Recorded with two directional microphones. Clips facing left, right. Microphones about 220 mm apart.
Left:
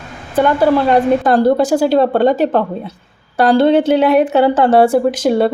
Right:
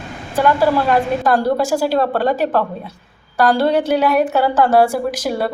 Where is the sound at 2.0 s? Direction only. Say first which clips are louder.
Left 5 dB; 25° left (ahead or behind).